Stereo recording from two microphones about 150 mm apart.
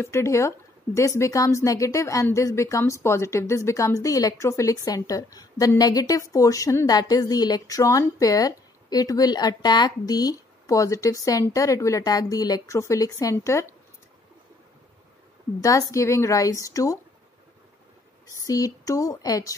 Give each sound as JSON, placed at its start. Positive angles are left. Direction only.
{"t": 0.0, "sound": "a woman's voice", "side_deg": 20}
{"t": 15.6, "sound": "a woman's voice", "side_deg": 20}
{"t": 18.4, "sound": "a woman's voice", "side_deg": 20}